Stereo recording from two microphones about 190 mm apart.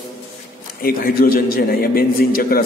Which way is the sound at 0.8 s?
50° left (ahead or behind).